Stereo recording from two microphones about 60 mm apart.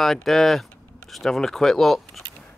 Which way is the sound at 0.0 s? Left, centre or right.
Centre.